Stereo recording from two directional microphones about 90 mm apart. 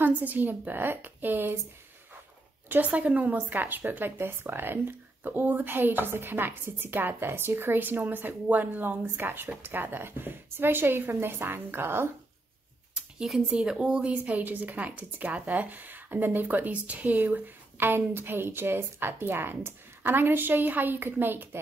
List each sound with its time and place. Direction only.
0.0 s speech: 20° right (ahead or behind)
2.7 s speech: 15° right (ahead or behind)
12.9 s speech: 5° right (ahead or behind); by 21.5 s 25° right (ahead or behind)